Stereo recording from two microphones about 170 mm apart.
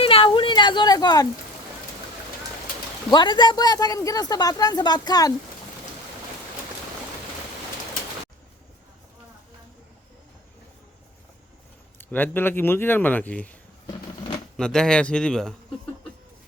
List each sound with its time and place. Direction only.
0.0 s a sound: 35° left (ahead or behind)
3.1 s speech: 25° left (ahead or behind)
11.9 s speech: 10° left (ahead or behind)
14.5 s speech: 5° left (ahead or behind)